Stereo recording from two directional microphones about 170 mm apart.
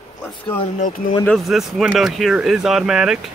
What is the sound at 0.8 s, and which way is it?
Speech, 55° left (ahead or behind).